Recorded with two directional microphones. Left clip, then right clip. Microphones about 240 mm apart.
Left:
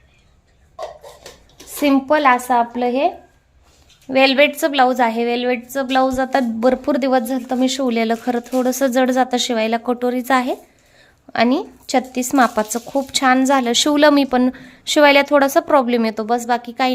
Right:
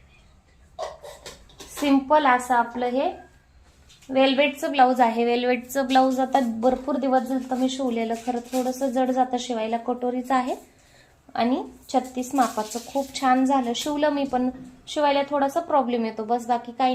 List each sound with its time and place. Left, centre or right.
1.8 s a woman's voice: left
4.1 s a woman's voice: left